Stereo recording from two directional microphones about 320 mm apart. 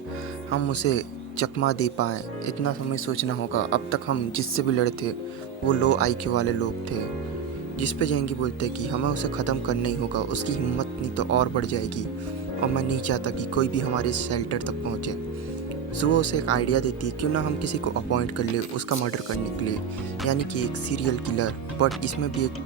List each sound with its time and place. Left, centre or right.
0.5 s speech: left
20.2 s speech: left